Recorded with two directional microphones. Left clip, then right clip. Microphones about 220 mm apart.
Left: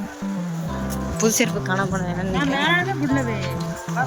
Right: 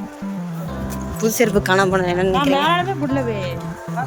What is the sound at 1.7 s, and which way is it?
Speech, 45° right (ahead or behind).